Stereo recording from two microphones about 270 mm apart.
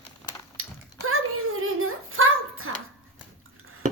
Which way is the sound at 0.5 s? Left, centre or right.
Right.